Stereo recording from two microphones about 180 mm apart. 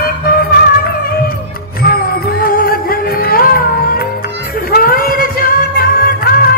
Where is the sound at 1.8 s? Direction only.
55° left (ahead or behind).